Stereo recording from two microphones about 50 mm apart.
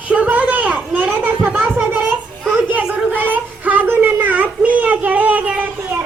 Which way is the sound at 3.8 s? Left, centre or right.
Right.